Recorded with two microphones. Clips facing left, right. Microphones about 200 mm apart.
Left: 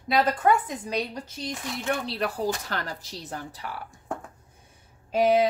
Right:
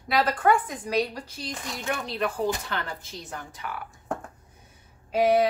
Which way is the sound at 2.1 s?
35° left (ahead or behind).